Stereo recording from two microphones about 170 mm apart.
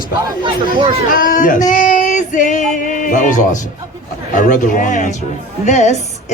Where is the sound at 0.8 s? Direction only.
30° right (ahead or behind).